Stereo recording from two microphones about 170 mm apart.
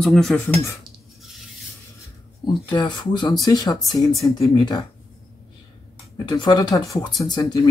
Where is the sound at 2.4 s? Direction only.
25° left (ahead or behind).